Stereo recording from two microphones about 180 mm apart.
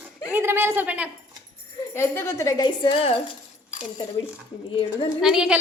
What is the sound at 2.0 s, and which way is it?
Speech, 15° left (ahead or behind).